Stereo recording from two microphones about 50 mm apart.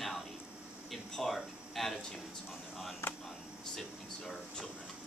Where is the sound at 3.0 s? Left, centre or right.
Left.